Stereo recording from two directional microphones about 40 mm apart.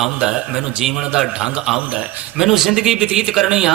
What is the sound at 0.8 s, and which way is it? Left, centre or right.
A man's voice, centre.